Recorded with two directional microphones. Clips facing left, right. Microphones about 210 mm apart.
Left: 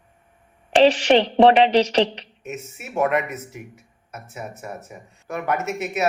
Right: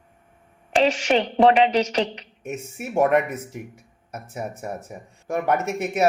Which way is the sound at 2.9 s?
30° right (ahead or behind).